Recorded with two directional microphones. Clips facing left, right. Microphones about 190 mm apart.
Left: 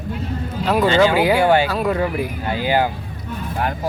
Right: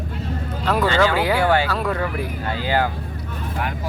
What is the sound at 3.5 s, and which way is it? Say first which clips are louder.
Speech: left 5 dB; 40° left (ahead or behind).